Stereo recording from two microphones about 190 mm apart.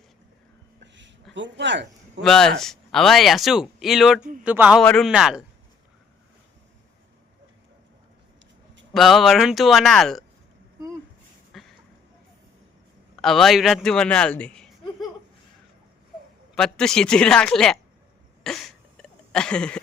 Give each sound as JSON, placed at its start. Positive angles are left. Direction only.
{"t": 1.3, "sound": "speech", "side_deg": -70}
{"t": 2.2, "sound": "a man's voice", "side_deg": 5}
{"t": 4.8, "sound": "speech", "side_deg": 5}
{"t": 8.9, "sound": "speech", "side_deg": 0}
{"t": 11.5, "sound": "a sound", "side_deg": 0}
{"t": 13.1, "sound": "speech", "side_deg": 0}
{"t": 16.6, "sound": "speech", "side_deg": 5}
{"t": 18.4, "sound": "a sound", "side_deg": 0}